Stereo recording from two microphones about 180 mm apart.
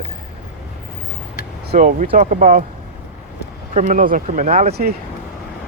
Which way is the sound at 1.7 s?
45° right (ahead or behind).